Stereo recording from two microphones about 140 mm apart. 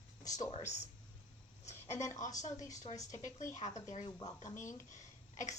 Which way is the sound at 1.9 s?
55° left (ahead or behind).